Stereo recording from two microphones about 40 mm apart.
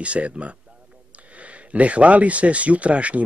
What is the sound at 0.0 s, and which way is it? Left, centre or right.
Speech, right.